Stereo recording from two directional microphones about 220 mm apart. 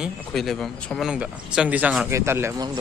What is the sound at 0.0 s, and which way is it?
A man's voice, centre (ahead or behind).